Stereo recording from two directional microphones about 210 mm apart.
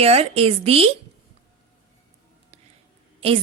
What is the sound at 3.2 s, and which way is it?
Speech, 25° right (ahead or behind).